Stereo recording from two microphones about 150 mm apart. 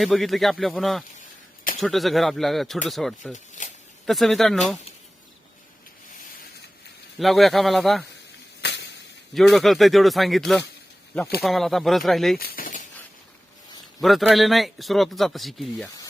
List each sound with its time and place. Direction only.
0.0 s speech: centre (ahead or behind)
3.3 s snake: 55° left (ahead or behind)
4.0 s speech: centre (ahead or behind)
7.2 s speech: centre (ahead or behind)
9.3 s speech: centre (ahead or behind)
12.4 s a sound: 70° left (ahead or behind)
14.0 s speech: centre (ahead or behind)